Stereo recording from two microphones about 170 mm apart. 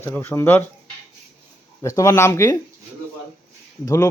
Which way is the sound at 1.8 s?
20° left (ahead or behind).